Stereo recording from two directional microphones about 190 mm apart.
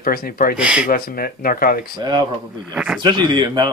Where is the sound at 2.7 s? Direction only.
5° right (ahead or behind).